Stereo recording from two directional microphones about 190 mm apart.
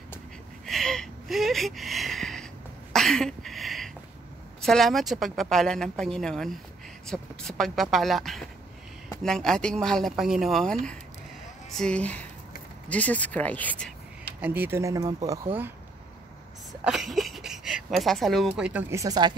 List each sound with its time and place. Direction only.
0.7 s a sound: centre (ahead or behind)
4.6 s a woman's voice: centre (ahead or behind)
14.4 s speech: 10° right (ahead or behind)
16.8 s speech: centre (ahead or behind); by 19.3 s 20° right (ahead or behind)